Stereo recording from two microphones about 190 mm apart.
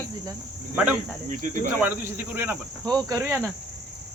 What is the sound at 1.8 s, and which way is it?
Speech, 10° right (ahead or behind).